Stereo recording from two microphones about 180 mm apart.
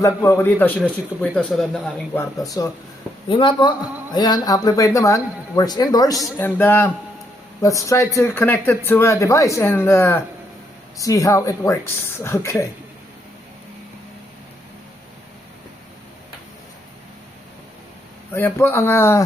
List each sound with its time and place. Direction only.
0.0 s speech: 15° left (ahead or behind)
2.1 s speech: 20° left (ahead or behind)
18.3 s speech: 15° left (ahead or behind)